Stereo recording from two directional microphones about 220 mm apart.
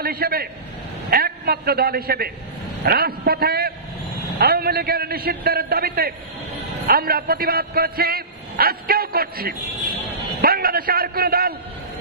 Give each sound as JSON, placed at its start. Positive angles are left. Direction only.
{"t": 0.0, "sound": "a man's voice", "side_deg": -45}